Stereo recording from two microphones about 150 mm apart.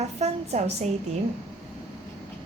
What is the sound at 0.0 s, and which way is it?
Speech, 50° right (ahead or behind).